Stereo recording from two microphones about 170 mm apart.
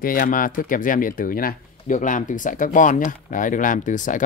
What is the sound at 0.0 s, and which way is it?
Speech, 55° left (ahead or behind).